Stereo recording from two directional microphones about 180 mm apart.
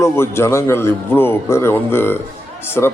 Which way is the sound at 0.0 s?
15° left (ahead or behind).